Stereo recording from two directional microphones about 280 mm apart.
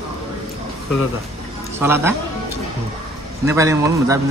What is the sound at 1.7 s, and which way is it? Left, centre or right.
Speech, centre.